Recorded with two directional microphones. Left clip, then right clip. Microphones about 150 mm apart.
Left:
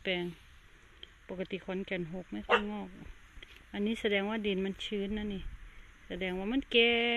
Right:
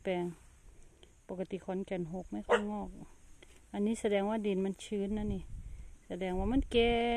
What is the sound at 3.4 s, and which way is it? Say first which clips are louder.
Speech: even; 25° right (ahead or behind).